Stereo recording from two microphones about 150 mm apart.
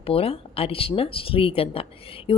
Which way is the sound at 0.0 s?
40° left (ahead or behind).